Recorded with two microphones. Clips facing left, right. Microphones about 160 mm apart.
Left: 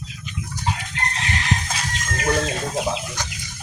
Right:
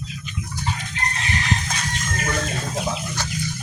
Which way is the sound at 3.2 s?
15° left (ahead or behind).